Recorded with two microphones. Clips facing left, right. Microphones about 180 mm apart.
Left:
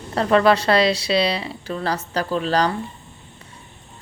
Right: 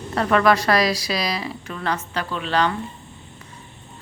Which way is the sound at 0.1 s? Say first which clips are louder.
Left 2 dB; 30° left (ahead or behind).